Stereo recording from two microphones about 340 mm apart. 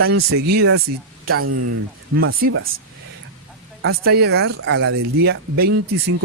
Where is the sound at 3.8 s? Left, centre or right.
Right.